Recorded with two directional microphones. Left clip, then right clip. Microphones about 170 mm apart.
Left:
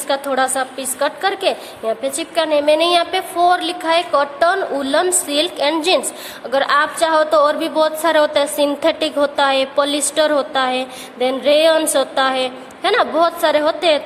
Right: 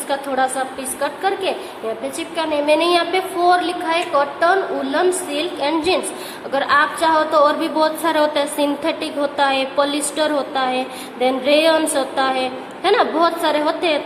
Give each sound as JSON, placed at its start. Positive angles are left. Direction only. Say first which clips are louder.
{"t": 0.1, "sound": "a woman's voice", "louder": "left 2 dB", "side_deg": 50}